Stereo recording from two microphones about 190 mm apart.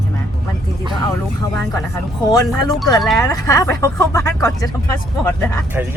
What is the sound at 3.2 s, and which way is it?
Speech, 20° left (ahead or behind).